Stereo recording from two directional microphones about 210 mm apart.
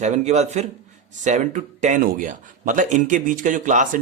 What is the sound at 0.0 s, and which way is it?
Speech, 30° right (ahead or behind).